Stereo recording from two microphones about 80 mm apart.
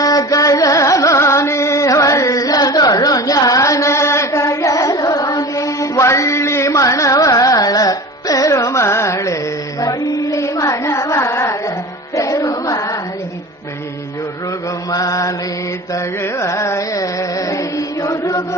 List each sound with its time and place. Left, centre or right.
0.0 s carnatic music: left
12.1 s female singing: left
14.8 s mantra: left
16.2 s carnatic music: left